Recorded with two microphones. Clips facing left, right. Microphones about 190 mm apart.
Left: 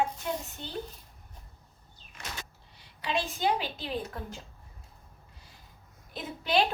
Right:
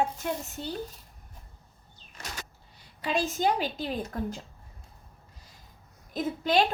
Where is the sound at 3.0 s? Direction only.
40° right (ahead or behind).